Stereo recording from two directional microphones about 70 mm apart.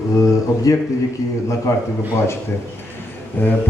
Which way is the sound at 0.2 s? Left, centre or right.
Left.